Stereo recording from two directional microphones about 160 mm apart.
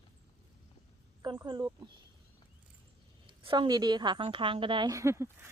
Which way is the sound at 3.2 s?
30° right (ahead or behind).